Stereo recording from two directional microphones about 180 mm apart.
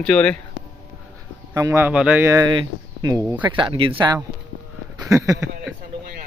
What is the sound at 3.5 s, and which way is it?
Speech, 25° right (ahead or behind).